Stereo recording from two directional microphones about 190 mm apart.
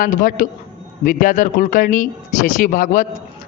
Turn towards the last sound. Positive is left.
turn(degrees=45)  # may be behind; listen again after turning